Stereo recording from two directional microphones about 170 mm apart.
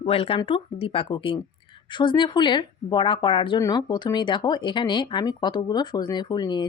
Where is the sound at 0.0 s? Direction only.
35° left (ahead or behind).